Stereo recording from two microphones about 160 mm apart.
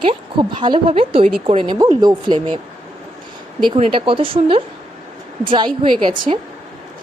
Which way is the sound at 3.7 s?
35° right (ahead or behind).